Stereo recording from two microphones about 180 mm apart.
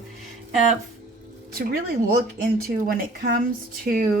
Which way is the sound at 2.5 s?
55° right (ahead or behind).